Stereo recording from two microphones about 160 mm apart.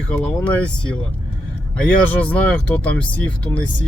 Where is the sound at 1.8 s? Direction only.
5° left (ahead or behind).